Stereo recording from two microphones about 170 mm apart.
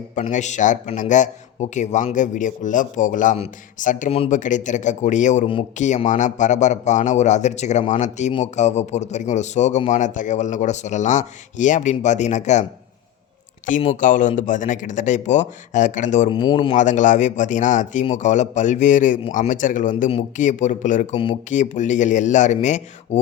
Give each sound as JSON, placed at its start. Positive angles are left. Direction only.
{"t": 0.2, "sound": "speech", "side_deg": 45}
{"t": 4.1, "sound": "speech", "side_deg": 35}
{"t": 4.4, "sound": "speech", "side_deg": 50}
{"t": 13.9, "sound": "speech", "side_deg": 50}
{"t": 16.3, "sound": "speech", "side_deg": 30}
{"t": 16.7, "sound": "speech", "side_deg": 45}